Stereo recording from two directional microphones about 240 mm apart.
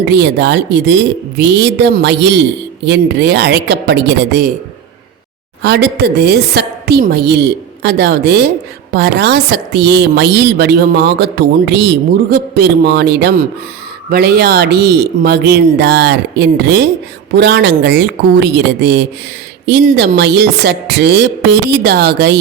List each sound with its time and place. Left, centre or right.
0.0 s a woman's voice: right
5.6 s a woman's voice: right